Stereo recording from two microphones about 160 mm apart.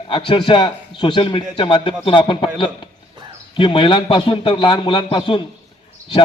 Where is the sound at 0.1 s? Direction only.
30° left (ahead or behind).